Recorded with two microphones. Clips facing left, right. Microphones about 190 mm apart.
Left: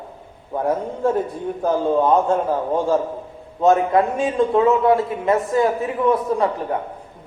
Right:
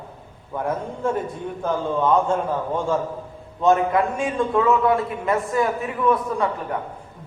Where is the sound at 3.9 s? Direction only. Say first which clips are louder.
Left 3 dB; 20° left (ahead or behind).